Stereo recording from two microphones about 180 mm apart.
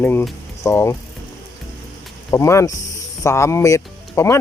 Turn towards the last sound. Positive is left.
turn(degrees=15)  # may be behind; listen again after turning